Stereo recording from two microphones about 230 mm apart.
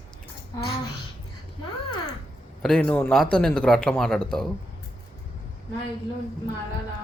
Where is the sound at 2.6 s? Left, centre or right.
Centre.